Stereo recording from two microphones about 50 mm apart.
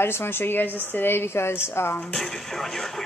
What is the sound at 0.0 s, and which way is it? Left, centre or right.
Speech, left.